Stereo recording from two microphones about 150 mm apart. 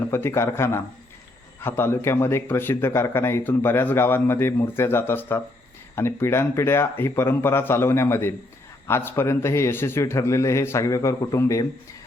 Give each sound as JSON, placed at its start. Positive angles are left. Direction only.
{"t": 0.1, "sound": "speech", "side_deg": 20}